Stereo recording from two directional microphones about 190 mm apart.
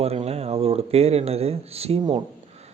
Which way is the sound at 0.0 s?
35° right (ahead or behind).